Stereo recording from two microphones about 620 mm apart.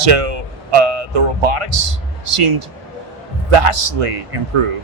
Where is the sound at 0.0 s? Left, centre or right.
Right.